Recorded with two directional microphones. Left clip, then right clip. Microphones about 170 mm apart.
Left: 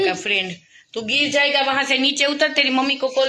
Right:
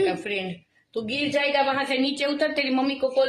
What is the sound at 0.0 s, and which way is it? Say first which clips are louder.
A woman's voice: left 5 dB; 15° left (ahead or behind).